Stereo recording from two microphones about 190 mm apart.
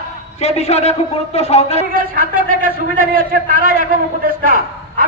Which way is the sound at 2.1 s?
50° right (ahead or behind).